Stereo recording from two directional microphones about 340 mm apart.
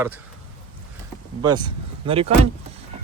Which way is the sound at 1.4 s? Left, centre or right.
Centre.